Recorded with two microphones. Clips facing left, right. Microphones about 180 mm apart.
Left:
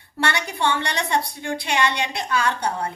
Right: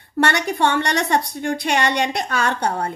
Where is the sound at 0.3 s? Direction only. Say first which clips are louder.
Even; 45° right (ahead or behind).